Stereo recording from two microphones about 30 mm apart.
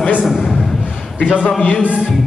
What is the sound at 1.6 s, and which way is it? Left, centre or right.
Music, left.